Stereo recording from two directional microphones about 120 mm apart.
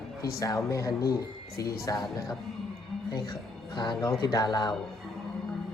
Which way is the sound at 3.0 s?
35° left (ahead or behind).